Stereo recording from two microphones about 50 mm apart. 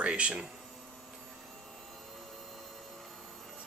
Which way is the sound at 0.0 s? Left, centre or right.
Right.